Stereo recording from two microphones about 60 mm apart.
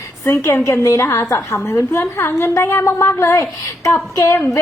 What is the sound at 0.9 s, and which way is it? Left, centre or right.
A woman's voice, left.